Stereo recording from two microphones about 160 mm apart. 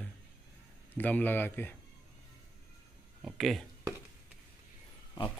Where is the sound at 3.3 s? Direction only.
Centre (ahead or behind).